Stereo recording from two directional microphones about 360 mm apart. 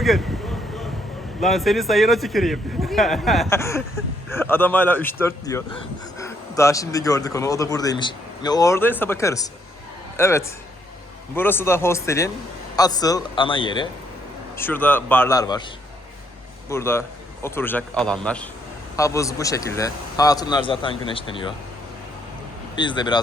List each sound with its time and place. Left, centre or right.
0.0 s speech: centre
1.4 s a man's voice: centre
16.6 s a man's voice: centre
22.7 s a man's voice: centre